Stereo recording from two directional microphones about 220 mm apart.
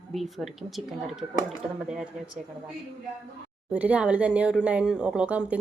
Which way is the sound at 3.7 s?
5° right (ahead or behind).